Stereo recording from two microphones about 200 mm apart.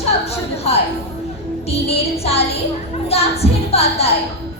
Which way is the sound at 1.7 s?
30° left (ahead or behind).